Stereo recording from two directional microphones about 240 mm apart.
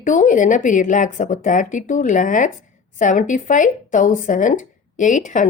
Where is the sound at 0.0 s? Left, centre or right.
Left.